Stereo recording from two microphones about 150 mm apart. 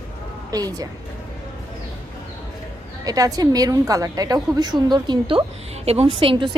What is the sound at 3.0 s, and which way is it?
A woman's voice, 25° right (ahead or behind).